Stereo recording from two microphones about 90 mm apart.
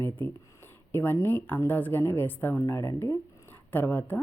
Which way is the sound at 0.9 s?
25° left (ahead or behind).